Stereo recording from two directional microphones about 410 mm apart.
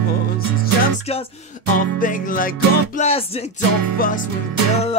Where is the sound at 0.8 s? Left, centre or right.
Centre.